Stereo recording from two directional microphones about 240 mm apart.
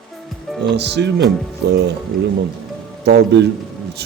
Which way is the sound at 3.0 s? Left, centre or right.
Right.